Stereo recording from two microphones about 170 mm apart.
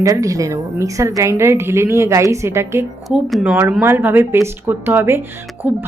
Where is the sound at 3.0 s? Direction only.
Centre (ahead or behind).